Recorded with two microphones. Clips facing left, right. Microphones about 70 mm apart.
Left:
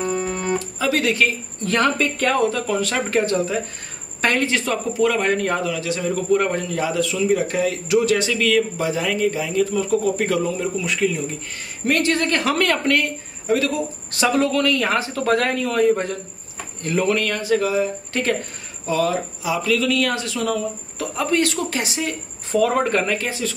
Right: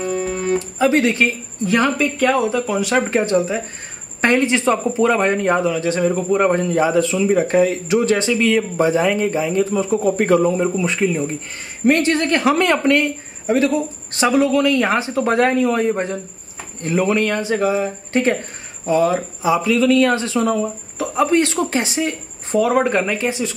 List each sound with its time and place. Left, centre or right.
0.0 s music: centre
0.6 s speech: right
1.6 s speech: centre; by 6.1 s right
6.1 s speech: right
10.1 s a man's voice: right
14.3 s speech: centre; by 22.6 s right
22.6 s speech: centre